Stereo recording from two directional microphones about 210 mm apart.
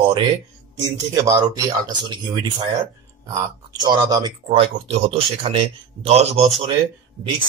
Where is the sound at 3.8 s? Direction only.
20° right (ahead or behind).